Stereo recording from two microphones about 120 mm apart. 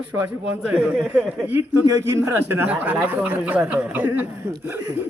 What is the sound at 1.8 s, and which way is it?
A man's voice, 25° right (ahead or behind).